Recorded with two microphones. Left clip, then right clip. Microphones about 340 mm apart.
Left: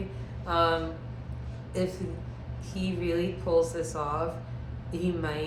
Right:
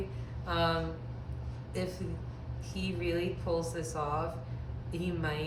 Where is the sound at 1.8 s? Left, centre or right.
Centre.